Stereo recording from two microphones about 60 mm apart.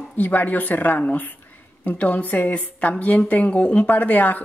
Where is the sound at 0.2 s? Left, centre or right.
Left.